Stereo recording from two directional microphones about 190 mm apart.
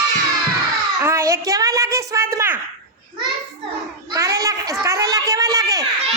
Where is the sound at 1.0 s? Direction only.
15° right (ahead or behind).